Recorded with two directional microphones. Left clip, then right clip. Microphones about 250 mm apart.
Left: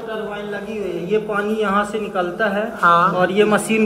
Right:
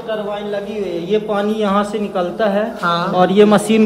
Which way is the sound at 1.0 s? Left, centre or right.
Right.